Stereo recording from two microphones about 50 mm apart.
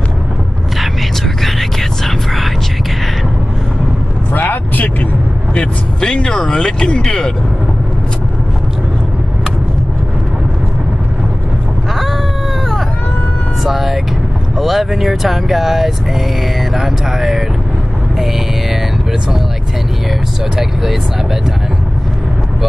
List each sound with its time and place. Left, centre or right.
1.4 s a sound: centre
4.3 s vehicle: left
5.9 s speech: centre
13.7 s vehicle: centre
14.6 s speech: centre
20.5 s speech: centre